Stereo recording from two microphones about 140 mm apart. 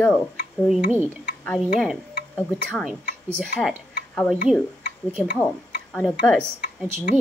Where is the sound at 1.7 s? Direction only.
Centre (ahead or behind).